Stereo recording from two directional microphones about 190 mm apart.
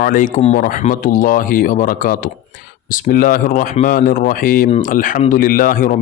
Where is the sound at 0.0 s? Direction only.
45° left (ahead or behind).